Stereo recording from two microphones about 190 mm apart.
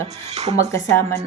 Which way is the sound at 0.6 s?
15° left (ahead or behind).